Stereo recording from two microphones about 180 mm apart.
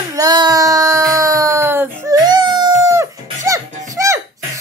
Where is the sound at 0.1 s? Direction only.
20° right (ahead or behind).